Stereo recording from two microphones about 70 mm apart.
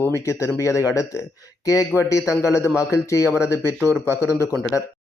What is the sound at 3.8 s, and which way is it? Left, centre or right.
Speech, right.